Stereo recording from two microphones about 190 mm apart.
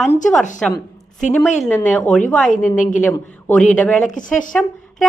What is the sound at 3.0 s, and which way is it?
Speech, 5° left (ahead or behind).